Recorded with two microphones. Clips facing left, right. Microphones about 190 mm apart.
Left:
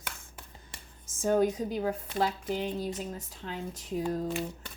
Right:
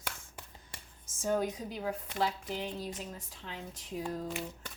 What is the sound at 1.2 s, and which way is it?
Speech, 50° left (ahead or behind).